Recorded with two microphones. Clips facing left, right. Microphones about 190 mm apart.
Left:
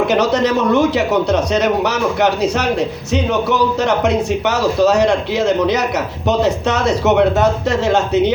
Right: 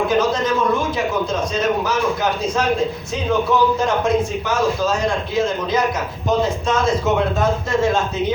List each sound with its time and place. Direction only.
0.1 s a man's voice: 75° left (ahead or behind)